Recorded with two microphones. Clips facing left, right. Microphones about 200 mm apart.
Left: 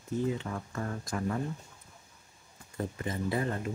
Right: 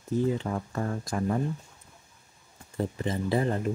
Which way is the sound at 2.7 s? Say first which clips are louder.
Right 5 dB; 25° right (ahead or behind).